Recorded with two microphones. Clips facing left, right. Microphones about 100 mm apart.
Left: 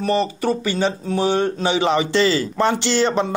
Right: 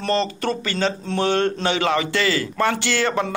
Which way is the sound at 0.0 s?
10° left (ahead or behind).